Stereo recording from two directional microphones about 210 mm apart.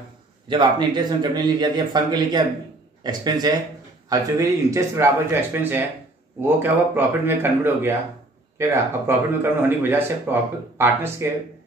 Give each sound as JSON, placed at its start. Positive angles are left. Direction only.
{"t": 0.5, "sound": "speech", "side_deg": -20}